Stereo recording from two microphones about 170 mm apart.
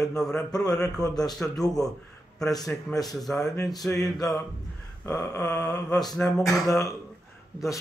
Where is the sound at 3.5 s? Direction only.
20° left (ahead or behind).